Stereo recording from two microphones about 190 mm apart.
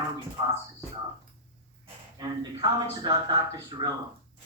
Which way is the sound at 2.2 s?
20° right (ahead or behind).